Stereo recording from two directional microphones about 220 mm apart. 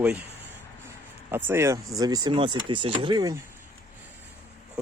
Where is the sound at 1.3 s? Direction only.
10° right (ahead or behind).